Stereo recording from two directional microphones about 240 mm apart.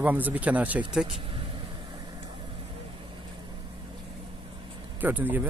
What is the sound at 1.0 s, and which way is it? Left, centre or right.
Vehicle, right.